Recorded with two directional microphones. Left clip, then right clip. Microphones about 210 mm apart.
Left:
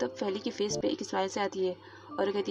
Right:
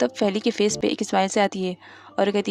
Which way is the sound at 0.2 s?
45° right (ahead or behind).